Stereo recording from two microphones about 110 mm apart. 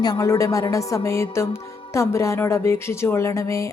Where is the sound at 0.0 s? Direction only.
35° left (ahead or behind).